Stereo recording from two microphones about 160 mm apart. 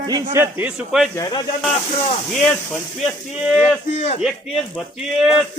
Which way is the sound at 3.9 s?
45° left (ahead or behind).